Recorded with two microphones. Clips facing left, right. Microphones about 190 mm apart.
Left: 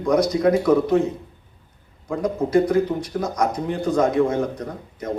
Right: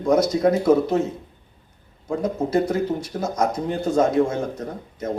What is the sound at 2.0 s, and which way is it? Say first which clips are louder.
Speech: left 1 dB; 25° right (ahead or behind).